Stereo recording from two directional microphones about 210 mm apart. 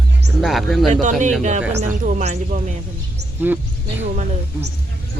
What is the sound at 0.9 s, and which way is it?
Speech, 35° right (ahead or behind).